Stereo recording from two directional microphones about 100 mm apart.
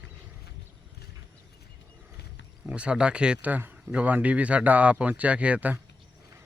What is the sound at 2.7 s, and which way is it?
Speech, 10° right (ahead or behind).